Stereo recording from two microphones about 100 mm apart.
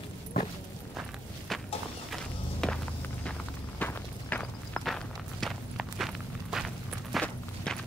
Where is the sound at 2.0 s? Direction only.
5° left (ahead or behind).